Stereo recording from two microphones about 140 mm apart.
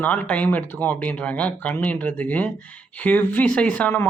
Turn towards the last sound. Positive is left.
turn(degrees=10)  # may be behind; listen again after turning